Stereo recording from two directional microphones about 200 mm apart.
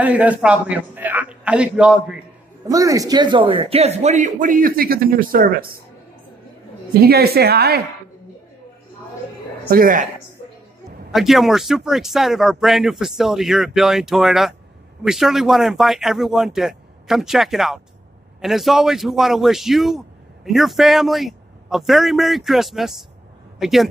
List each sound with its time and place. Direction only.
0.0 s a man's voice: 5° right (ahead or behind)
2.6 s a man's voice: 15° right (ahead or behind); by 5.8 s 50° right (ahead or behind)
7.0 s speech: 50° right (ahead or behind)
9.7 s speech: 45° right (ahead or behind)
11.1 s speech: centre (ahead or behind)